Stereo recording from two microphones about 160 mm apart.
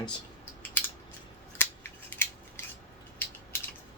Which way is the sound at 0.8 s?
15° left (ahead or behind).